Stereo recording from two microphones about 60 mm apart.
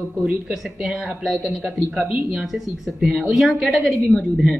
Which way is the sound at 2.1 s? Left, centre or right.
Centre.